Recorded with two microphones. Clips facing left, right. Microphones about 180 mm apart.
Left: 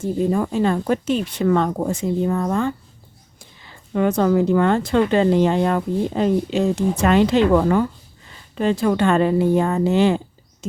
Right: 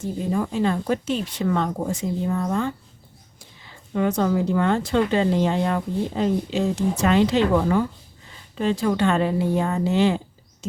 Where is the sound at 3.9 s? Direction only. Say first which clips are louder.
Left 4 dB; 55° left (ahead or behind).